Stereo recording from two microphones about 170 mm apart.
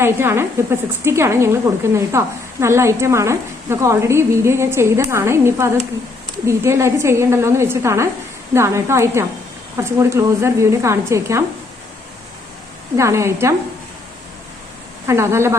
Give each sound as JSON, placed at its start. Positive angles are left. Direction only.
{"t": 0.0, "sound": "speech", "side_deg": -15}
{"t": 13.0, "sound": "speech", "side_deg": -15}
{"t": 15.0, "sound": "speech", "side_deg": -15}